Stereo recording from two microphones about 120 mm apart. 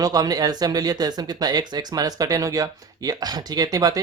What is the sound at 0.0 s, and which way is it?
Speech, 30° right (ahead or behind).